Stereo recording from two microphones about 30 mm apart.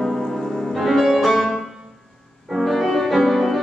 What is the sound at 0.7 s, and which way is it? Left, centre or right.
Music, centre.